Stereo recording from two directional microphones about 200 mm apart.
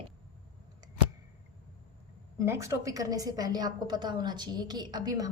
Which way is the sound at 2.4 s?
15° right (ahead or behind).